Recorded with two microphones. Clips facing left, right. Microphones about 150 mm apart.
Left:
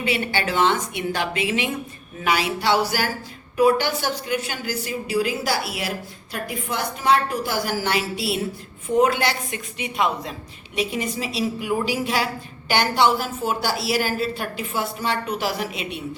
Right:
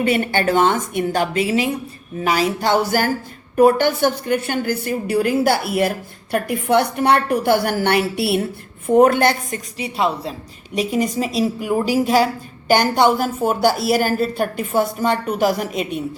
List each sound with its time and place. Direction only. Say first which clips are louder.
0.0 s a woman's voice: right 6 dB; 50° right (ahead or behind)
6.3 s a woman's voice: right 11 dB; 60° right (ahead or behind)
9.7 s a woman's voice: right 3 dB; 35° right (ahead or behind)